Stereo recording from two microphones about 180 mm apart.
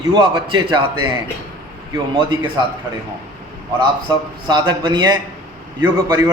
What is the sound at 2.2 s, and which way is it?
Speech, 25° right (ahead or behind).